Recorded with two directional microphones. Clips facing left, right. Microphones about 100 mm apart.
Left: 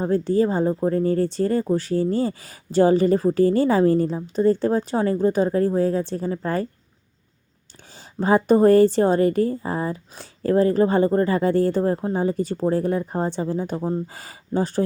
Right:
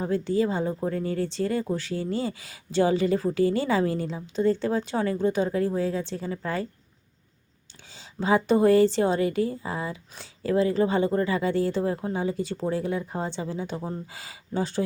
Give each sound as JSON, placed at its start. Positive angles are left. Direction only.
{"t": 0.0, "sound": "a woman's voice", "side_deg": 40}
{"t": 7.9, "sound": "a woman's voice", "side_deg": 45}